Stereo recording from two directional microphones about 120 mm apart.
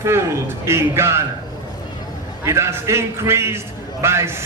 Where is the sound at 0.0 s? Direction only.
20° right (ahead or behind).